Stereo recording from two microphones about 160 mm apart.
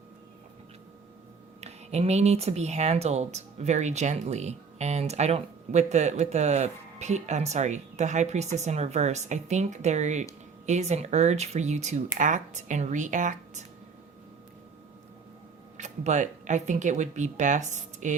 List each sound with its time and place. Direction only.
1.6 s speech: 40° right (ahead or behind)
15.8 s speech: 50° right (ahead or behind)